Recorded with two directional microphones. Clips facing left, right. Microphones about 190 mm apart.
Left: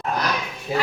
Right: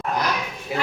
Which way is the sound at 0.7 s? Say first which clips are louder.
Left 3 dB; 30° left (ahead or behind).